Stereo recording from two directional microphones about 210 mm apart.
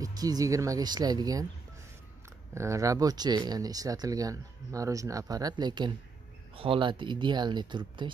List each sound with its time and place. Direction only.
0.0 s speech: 20° right (ahead or behind)
2.5 s speech: 15° right (ahead or behind)